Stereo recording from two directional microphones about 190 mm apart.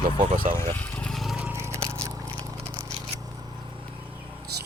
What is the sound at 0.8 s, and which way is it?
Biting, 5° left (ahead or behind).